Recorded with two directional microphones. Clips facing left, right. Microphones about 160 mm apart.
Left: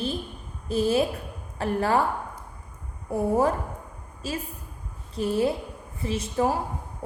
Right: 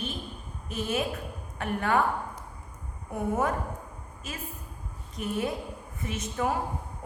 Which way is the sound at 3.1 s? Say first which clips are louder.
Left 5 dB; 35° left (ahead or behind).